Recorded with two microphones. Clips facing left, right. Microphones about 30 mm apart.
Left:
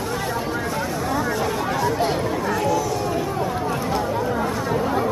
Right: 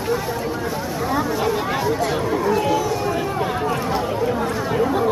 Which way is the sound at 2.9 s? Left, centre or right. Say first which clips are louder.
Right 2 dB; centre.